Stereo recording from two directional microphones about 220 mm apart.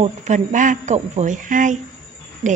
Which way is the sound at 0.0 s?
30° right (ahead or behind).